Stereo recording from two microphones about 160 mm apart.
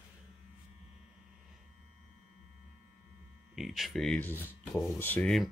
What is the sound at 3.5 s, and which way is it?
Speech, centre (ahead or behind).